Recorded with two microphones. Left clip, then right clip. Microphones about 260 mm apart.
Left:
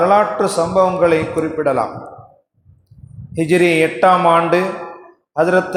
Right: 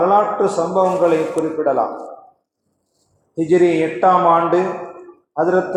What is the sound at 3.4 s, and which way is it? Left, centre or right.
A man's voice, left.